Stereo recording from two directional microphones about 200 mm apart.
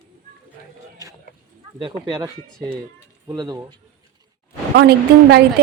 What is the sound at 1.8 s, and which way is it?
Speech, 25° right (ahead or behind).